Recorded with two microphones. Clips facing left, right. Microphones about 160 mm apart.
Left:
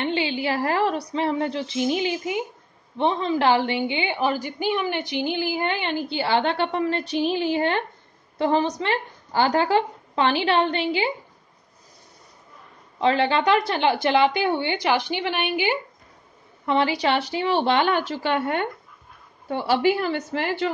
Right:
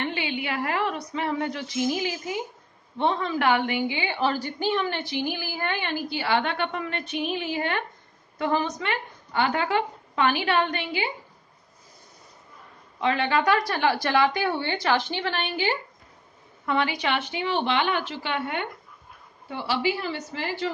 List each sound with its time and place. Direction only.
0.0 s a woman's voice: 30° left (ahead or behind)
13.0 s a woman's voice: 30° left (ahead or behind); by 15.8 s 15° left (ahead or behind)
16.6 s a woman's voice: 30° left (ahead or behind); by 20.7 s 60° left (ahead or behind)